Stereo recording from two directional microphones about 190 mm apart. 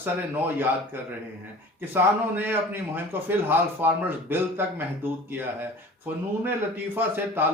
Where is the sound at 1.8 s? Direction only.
10° right (ahead or behind).